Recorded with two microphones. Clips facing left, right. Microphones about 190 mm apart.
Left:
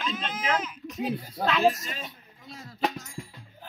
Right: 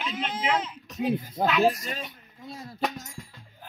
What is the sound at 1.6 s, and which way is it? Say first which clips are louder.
Speech: even; 40° right (ahead or behind).